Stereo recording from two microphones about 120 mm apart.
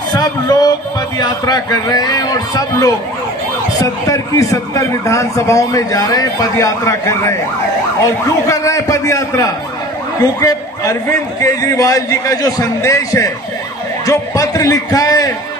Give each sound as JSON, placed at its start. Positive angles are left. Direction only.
{"t": 0.1, "sound": "a man's voice", "side_deg": 35}